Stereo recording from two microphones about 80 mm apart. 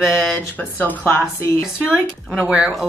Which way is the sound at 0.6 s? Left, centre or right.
Left.